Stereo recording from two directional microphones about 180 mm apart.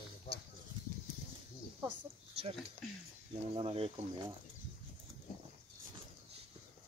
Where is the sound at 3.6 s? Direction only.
30° right (ahead or behind).